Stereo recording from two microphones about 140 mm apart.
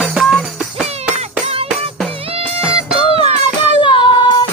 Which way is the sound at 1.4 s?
45° right (ahead or behind).